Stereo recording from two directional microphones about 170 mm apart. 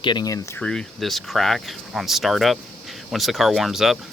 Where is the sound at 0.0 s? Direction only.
25° left (ahead or behind).